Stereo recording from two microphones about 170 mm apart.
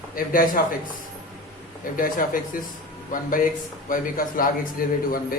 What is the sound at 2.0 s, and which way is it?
A man's voice, 55° left (ahead or behind).